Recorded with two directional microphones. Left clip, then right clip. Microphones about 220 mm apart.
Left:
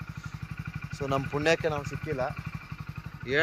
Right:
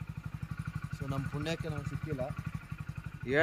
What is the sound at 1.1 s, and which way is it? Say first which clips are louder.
Speech: left 12 dB; 45° left (ahead or behind).